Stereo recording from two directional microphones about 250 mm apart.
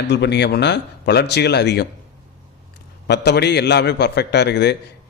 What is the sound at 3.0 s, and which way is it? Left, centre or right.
A man's voice, left.